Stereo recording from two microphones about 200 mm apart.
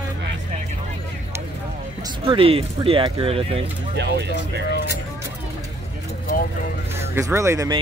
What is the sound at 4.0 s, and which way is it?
Speech, 60° right (ahead or behind).